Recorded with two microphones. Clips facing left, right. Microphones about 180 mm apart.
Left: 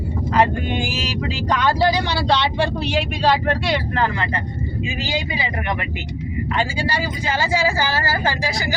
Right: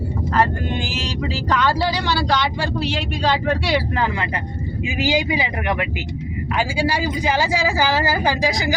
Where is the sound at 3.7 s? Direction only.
10° right (ahead or behind).